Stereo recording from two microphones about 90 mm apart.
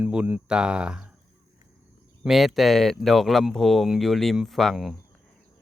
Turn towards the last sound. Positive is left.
turn(degrees=0)  # may be behind; listen again after turning